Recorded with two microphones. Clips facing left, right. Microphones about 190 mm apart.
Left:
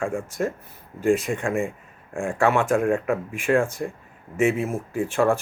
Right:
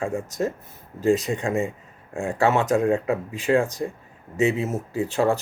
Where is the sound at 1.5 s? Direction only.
20° right (ahead or behind).